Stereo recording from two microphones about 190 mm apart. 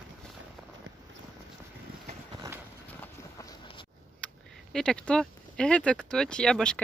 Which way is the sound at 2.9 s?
15° left (ahead or behind).